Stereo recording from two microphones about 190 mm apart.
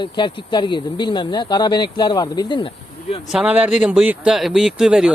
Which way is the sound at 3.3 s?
10° right (ahead or behind).